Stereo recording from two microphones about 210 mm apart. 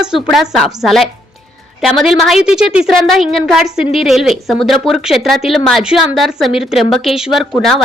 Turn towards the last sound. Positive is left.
turn(degrees=0)  # may be behind; listen again after turning